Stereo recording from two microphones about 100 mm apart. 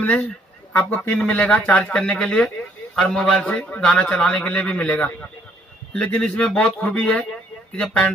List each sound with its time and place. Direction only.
0.0 s speech: 15° left (ahead or behind)